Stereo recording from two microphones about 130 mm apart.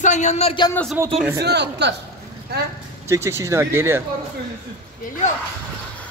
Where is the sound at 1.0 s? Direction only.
20° right (ahead or behind).